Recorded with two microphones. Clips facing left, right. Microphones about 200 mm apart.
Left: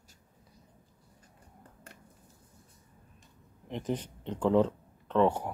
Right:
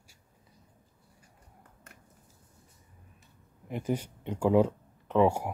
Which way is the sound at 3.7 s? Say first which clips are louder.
Right 2 dB; 10° right (ahead or behind).